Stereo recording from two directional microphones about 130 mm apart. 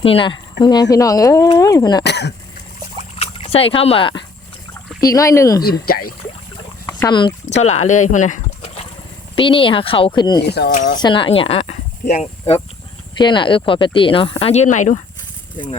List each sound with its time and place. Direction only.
0.0 s speech: 45° left (ahead or behind)
3.2 s dog: 50° left (ahead or behind)
4.9 s speech: 25° left (ahead or behind)
6.8 s speech: 35° left (ahead or behind)
7.5 s speech: 60° left (ahead or behind)
9.3 s speech: 40° left (ahead or behind)
13.1 s speech: 35° left (ahead or behind); by 14.9 s 70° left (ahead or behind)